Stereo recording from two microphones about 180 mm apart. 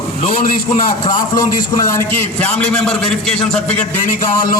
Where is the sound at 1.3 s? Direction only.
20° left (ahead or behind).